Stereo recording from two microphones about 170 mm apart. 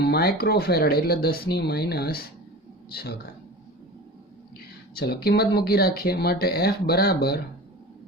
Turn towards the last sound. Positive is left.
turn(degrees=65)  # may be behind; listen again after turning